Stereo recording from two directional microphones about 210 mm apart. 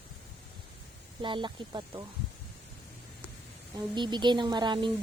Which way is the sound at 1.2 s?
25° right (ahead or behind).